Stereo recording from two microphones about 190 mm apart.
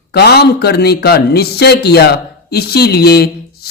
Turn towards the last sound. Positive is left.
turn(degrees=55)  # may be behind; listen again after turning